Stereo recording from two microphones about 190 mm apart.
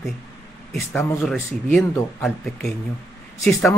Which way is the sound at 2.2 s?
Centre (ahead or behind).